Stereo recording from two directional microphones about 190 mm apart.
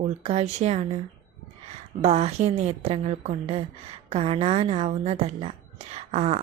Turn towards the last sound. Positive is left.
turn(degrees=-35)  # may be behind; listen again after turning